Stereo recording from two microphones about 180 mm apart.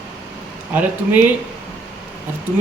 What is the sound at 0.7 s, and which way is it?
Speech, 10° right (ahead or behind).